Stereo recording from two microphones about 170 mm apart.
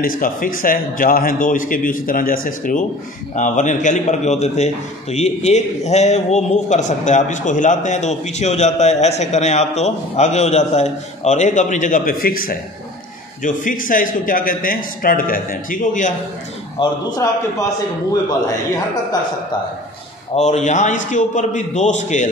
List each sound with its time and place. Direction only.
0.0 s a man's voice: 55° left (ahead or behind)
16.8 s a man's voice: 30° left (ahead or behind)
20.3 s a man's voice: 40° left (ahead or behind)